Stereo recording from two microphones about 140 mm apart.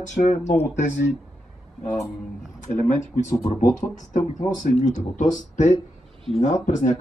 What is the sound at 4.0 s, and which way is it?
Speech, 65° left (ahead or behind).